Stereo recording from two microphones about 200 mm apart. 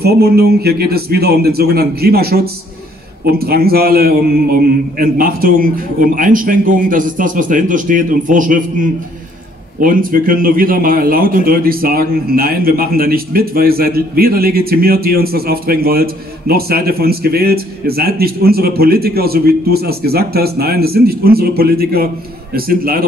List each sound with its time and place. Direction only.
0.0 s a man's voice: 50° right (ahead or behind)
9.8 s a man's voice: 45° right (ahead or behind)